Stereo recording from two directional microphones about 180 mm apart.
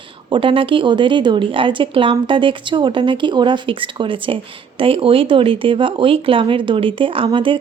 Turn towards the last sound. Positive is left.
turn(degrees=-25)  # may be behind; listen again after turning